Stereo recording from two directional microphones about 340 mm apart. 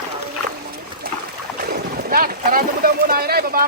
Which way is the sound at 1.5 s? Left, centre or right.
Right.